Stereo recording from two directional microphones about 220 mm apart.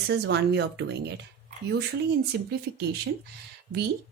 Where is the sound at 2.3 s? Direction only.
45° right (ahead or behind).